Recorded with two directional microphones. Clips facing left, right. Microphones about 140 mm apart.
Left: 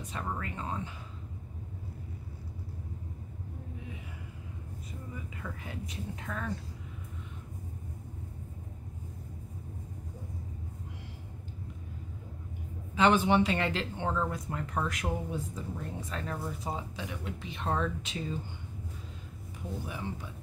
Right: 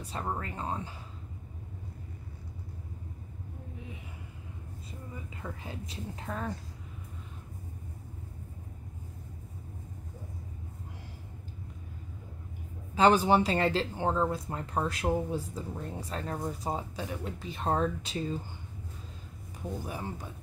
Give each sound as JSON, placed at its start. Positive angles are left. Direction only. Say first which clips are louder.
{"t": 0.0, "sound": "speech", "louder": "right 2 dB", "side_deg": -30}
{"t": 5.3, "sound": "speech", "louder": "even", "side_deg": -30}
{"t": 12.9, "sound": "speech", "louder": "right 2 dB", "side_deg": -40}
{"t": 19.9, "sound": "speech", "louder": "right 1 dB", "side_deg": -40}